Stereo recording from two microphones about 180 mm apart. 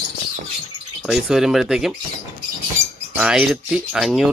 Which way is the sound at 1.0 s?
5° right (ahead or behind).